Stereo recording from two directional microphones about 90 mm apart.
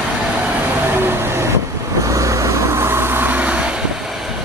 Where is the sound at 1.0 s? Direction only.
25° right (ahead or behind).